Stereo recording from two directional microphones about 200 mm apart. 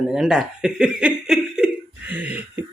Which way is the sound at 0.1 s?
5° right (ahead or behind).